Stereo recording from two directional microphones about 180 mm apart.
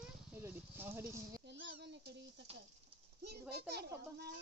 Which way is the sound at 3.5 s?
65° right (ahead or behind).